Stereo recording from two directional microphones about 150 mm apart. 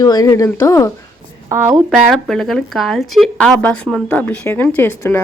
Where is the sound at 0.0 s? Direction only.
25° left (ahead or behind).